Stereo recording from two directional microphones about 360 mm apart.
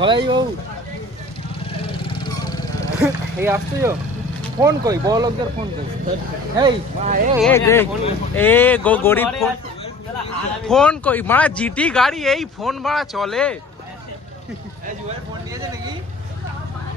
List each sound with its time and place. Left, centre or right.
0.0 s speech: centre
1.9 s vehicle: centre
3.0 s speech: centre
6.6 s speech: centre
7.3 s speech: centre
10.7 s speech: centre
15.0 s vehicle: centre